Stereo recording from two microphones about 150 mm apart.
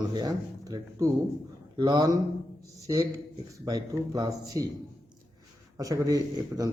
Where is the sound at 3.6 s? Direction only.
25° right (ahead or behind).